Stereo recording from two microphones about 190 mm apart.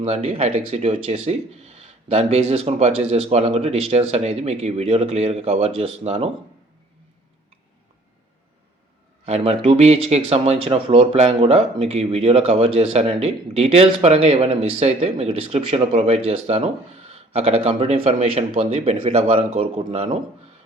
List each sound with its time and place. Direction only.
0.0 s speech: 30° right (ahead or behind)
9.2 s speech: 30° right (ahead or behind)